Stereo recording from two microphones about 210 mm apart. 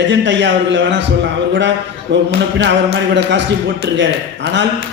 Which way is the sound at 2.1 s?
55° right (ahead or behind).